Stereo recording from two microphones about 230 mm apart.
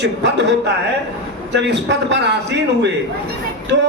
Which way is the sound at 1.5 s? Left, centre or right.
Right.